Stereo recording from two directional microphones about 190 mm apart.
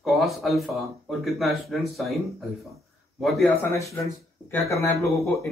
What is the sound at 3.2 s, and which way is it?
Speech, centre (ahead or behind).